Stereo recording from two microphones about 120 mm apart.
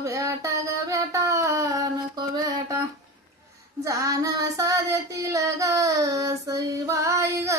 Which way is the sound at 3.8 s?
25° right (ahead or behind).